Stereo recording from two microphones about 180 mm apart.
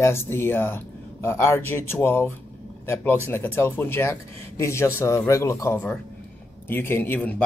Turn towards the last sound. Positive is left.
turn(degrees=10)  # may be behind; listen again after turning